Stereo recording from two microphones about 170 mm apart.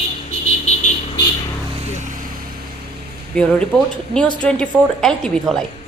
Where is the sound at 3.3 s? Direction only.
5° left (ahead or behind).